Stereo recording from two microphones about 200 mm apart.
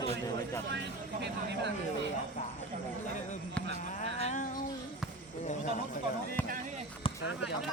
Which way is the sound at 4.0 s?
35° left (ahead or behind).